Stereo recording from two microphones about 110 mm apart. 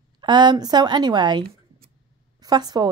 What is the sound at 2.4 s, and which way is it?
Speech, 40° right (ahead or behind).